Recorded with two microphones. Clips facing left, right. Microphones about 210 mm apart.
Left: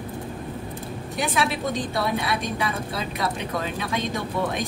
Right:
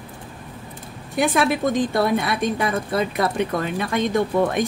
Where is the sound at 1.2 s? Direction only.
55° right (ahead or behind).